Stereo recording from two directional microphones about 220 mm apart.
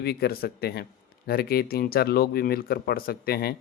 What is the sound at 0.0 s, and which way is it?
Speech, 45° left (ahead or behind).